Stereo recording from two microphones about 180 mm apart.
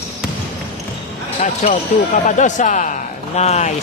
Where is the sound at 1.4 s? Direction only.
40° left (ahead or behind).